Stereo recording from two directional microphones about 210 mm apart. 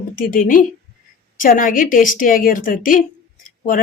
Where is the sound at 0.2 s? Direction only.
40° left (ahead or behind).